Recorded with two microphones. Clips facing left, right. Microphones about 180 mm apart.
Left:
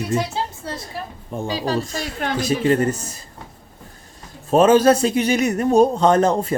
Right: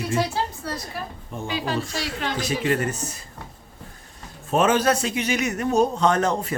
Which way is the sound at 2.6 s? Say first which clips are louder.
Left 6 dB; 35° left (ahead or behind).